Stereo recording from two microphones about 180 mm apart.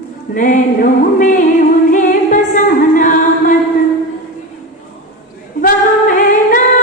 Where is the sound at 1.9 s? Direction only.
45° left (ahead or behind).